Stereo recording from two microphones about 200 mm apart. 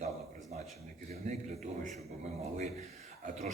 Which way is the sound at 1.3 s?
35° right (ahead or behind).